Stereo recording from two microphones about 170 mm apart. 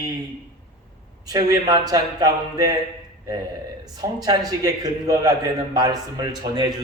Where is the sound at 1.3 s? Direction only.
20° right (ahead or behind).